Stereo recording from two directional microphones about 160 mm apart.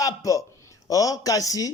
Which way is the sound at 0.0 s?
20° left (ahead or behind).